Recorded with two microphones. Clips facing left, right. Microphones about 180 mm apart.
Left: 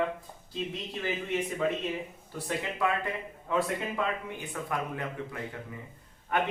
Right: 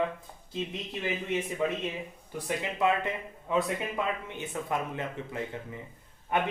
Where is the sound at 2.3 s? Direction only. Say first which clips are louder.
Right 1 dB; 15° right (ahead or behind).